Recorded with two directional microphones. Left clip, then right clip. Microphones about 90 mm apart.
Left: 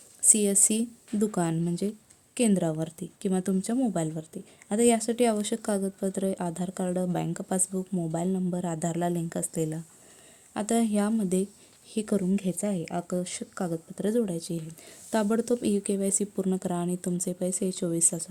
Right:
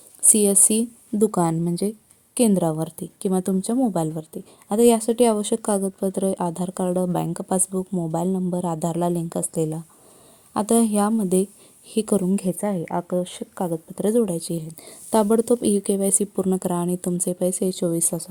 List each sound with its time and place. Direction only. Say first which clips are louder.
0.3 s a woman's voice: right 5 dB; 35° right (ahead or behind)
12.9 s speech: right 7 dB; 5° left (ahead or behind)
13.1 s speech: right 7 dB; 30° left (ahead or behind)
13.9 s speech: right 7 dB; 40° right (ahead or behind)
18.1 s speech: right 7 dB; 15° right (ahead or behind)